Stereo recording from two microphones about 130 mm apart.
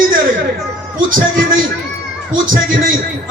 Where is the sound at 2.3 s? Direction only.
90° right.